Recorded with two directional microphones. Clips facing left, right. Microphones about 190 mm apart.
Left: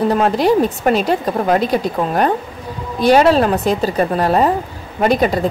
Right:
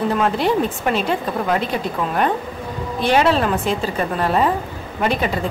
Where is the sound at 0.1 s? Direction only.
40° left (ahead or behind).